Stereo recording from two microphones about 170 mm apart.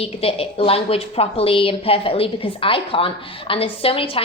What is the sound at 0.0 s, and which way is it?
A woman's voice, 35° left (ahead or behind).